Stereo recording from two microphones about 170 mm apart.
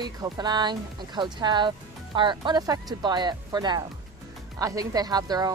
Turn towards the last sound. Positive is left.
turn(degrees=-25)  # may be behind; listen again after turning